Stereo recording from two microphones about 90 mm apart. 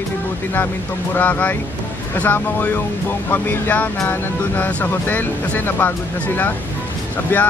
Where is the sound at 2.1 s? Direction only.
20° left (ahead or behind).